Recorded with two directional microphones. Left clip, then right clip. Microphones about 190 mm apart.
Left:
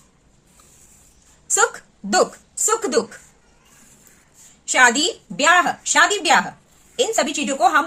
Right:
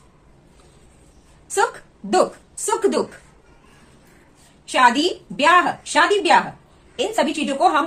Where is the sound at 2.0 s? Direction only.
30° left (ahead or behind).